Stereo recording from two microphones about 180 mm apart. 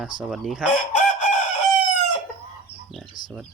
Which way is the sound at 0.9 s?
40° left (ahead or behind).